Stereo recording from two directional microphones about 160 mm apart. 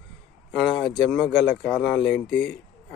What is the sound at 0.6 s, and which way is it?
Speech, centre (ahead or behind).